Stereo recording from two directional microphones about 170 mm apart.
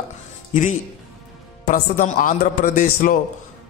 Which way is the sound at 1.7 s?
50° left (ahead or behind).